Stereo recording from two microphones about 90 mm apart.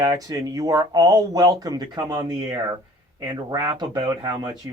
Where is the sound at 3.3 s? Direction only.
50° right (ahead or behind).